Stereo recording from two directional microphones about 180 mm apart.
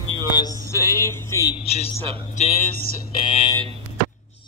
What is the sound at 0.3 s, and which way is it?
Speech, 20° left (ahead or behind).